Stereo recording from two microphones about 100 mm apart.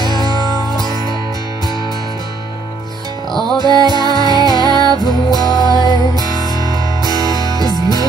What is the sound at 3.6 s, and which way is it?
Music, 45° right (ahead or behind).